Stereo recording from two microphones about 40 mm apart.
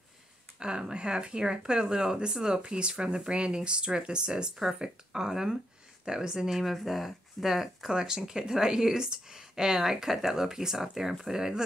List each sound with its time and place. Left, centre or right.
0.6 s speech: right
6.6 s speech: centre